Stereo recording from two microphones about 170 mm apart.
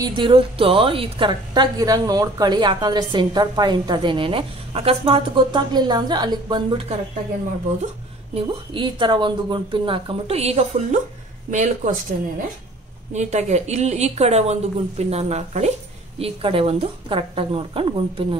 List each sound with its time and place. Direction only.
0.0 s a woman's voice: 30° right (ahead or behind)
8.4 s speech: 30° right (ahead or behind)